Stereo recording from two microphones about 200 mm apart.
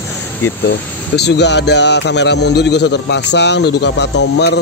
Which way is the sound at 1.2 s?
60° left (ahead or behind).